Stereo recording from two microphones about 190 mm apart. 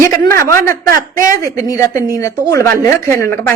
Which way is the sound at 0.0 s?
15° left (ahead or behind).